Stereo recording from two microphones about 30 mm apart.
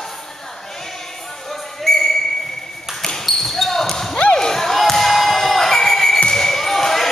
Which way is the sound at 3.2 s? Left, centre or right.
Centre.